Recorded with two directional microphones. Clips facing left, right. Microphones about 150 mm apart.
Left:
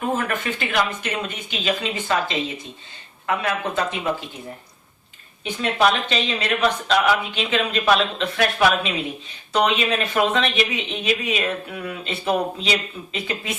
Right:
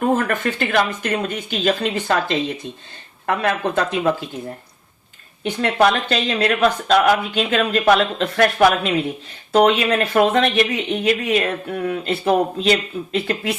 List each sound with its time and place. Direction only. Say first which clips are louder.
0.3 s speech: right 5 dB; 55° right (ahead or behind)
5.4 s speech: right 4 dB; 65° right (ahead or behind)
5.7 s speech: right 3 dB; 55° right (ahead or behind)